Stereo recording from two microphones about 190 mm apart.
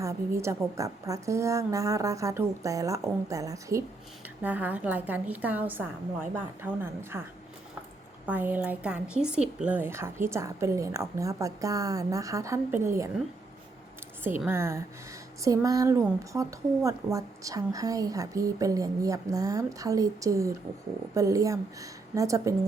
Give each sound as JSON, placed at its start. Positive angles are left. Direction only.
{"t": 0.0, "sound": "a woman's voice", "side_deg": -15}
{"t": 8.3, "sound": "a woman's voice", "side_deg": -10}
{"t": 14.4, "sound": "a woman's voice", "side_deg": -15}